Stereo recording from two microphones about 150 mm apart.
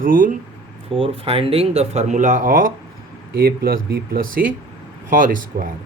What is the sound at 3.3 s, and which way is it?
Speech, 90° right.